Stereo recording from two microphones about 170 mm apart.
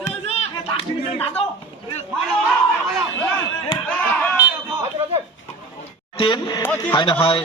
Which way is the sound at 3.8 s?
5° left (ahead or behind).